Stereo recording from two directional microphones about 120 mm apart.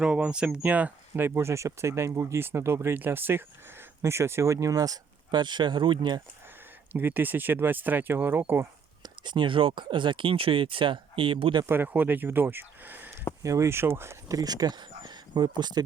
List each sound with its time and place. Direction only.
0.0 s speech: 10° right (ahead or behind); by 6.2 s 40° right (ahead or behind)
6.9 s speech: 15° right (ahead or behind)
9.0 s speech: 40° right (ahead or behind)
11.6 s speech: 15° right (ahead or behind); by 15.8 s 35° right (ahead or behind)